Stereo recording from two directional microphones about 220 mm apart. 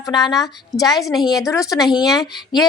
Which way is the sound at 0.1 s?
20° left (ahead or behind).